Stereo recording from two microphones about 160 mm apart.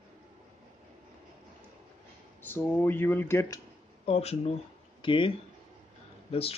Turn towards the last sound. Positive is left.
turn(degrees=35)  # may be behind; listen again after turning